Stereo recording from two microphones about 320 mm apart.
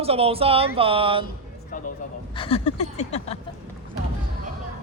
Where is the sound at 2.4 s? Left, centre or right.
Centre.